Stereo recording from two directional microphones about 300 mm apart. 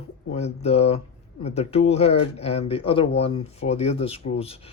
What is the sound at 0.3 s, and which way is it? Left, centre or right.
Speech, left.